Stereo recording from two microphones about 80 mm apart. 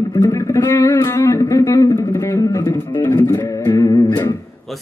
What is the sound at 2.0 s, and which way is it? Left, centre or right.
Guitar, left.